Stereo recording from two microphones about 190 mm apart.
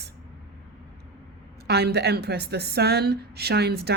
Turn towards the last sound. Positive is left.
turn(degrees=-55)  # may be behind; listen again after turning